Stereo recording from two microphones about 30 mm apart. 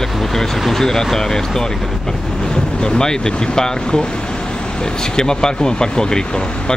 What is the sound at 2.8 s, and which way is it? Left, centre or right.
Speech, left.